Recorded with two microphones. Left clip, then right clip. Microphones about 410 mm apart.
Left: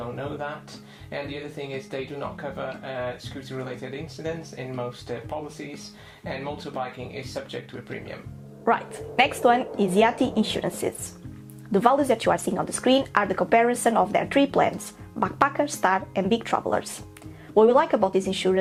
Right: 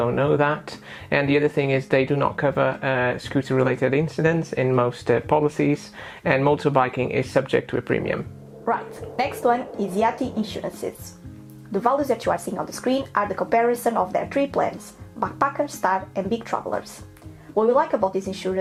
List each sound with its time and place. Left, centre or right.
1.1 s speech: right
8.6 s speech: left